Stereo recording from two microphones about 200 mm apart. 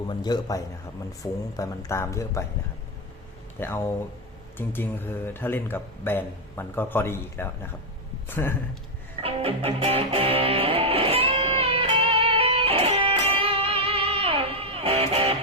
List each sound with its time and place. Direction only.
0.1 s a man's voice: 20° left (ahead or behind)
3.6 s speech: 10° left (ahead or behind)
9.2 s music: 30° right (ahead or behind)